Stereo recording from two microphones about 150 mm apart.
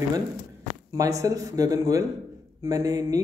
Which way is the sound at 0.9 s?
20° right (ahead or behind).